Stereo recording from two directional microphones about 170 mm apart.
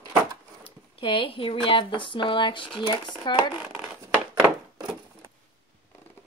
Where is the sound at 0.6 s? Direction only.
30° left (ahead or behind).